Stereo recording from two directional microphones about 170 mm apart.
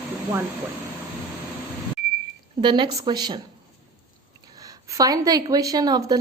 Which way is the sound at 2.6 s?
25° right (ahead or behind).